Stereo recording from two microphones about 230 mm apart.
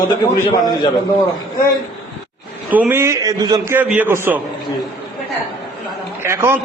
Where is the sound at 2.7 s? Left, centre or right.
Centre.